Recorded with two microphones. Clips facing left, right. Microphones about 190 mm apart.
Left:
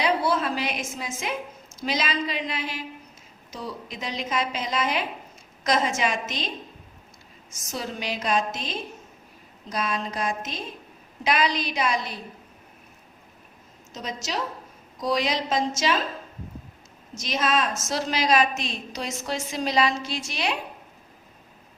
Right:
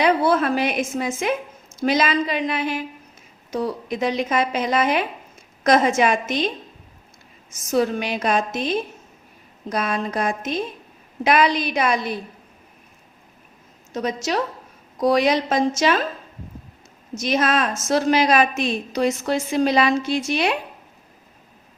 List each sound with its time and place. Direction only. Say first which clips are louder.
0.0 s a woman's voice: right 6 dB; 55° right (ahead or behind)
7.7 s a woman's voice: right 11 dB; 55° right (ahead or behind)
13.9 s a woman's voice: right 8 dB; 55° right (ahead or behind)
17.2 s a woman's voice: right 5 dB; 55° right (ahead or behind)